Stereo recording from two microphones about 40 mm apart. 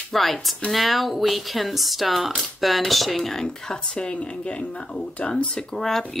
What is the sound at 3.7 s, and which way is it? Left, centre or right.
Speech, left.